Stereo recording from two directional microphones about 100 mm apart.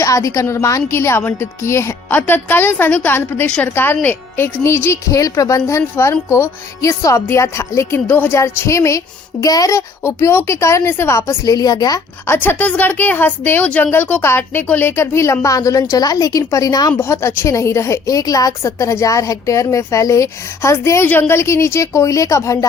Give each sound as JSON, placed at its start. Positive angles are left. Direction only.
{"t": 0.0, "sound": "a woman's voice", "side_deg": 35}
{"t": 11.2, "sound": "a woman's voice", "side_deg": 35}
{"t": 12.2, "sound": "a woman's voice", "side_deg": 25}